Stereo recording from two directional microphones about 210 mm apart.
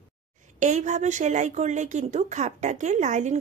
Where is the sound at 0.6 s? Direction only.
35° right (ahead or behind).